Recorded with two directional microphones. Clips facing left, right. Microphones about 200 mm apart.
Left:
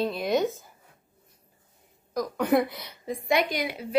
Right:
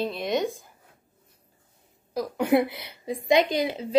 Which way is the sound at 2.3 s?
10° right (ahead or behind).